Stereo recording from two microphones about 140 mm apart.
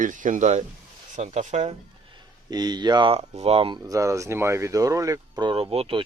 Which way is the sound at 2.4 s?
30° right (ahead or behind).